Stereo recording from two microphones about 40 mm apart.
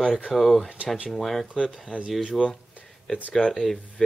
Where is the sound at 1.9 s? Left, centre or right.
Left.